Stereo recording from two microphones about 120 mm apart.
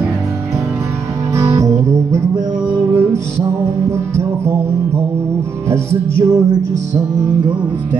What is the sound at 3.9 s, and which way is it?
Music, 25° right (ahead or behind).